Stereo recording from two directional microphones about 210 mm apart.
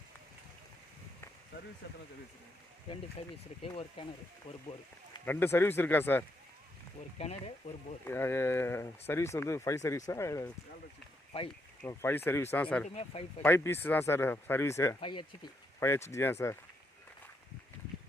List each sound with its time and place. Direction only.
1.8 s speech: 60° left (ahead or behind)
3.2 s speech: 30° left (ahead or behind)
5.2 s speech: 10° left (ahead or behind)
7.2 s speech: 30° left (ahead or behind)
8.0 s speech: 10° left (ahead or behind)
11.8 s speech: 10° left (ahead or behind)
12.9 s speech: 30° left (ahead or behind)
13.4 s speech: 10° left (ahead or behind)